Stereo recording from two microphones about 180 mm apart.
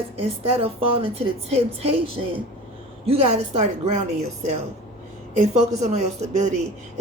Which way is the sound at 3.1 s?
35° right (ahead or behind).